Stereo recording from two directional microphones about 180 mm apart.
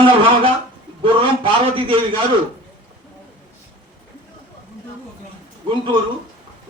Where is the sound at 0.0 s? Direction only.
30° right (ahead or behind).